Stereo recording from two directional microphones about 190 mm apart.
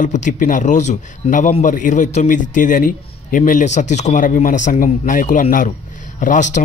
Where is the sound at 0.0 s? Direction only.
40° left (ahead or behind).